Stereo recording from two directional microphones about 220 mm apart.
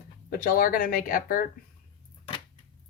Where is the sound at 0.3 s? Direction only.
40° left (ahead or behind).